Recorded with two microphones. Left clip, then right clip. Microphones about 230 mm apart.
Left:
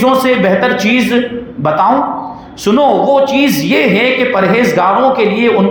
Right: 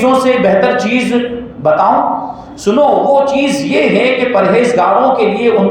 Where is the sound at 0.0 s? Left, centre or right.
Left.